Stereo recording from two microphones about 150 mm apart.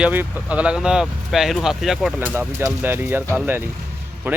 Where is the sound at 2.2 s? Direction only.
15° right (ahead or behind).